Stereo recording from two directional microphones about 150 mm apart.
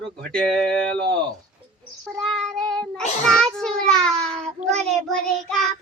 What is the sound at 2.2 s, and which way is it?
A child's voice, 5° left (ahead or behind).